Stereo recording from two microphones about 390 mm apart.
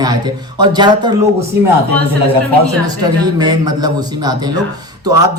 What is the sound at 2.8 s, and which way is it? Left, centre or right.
A man's voice, centre.